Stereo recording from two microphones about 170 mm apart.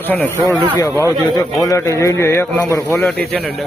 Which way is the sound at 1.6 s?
20° left (ahead or behind).